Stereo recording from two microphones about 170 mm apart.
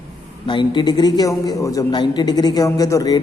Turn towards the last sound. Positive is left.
turn(degrees=20)  # may be behind; listen again after turning